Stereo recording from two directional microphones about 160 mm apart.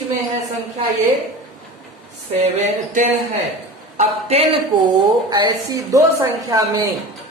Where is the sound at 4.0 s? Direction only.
40° right (ahead or behind).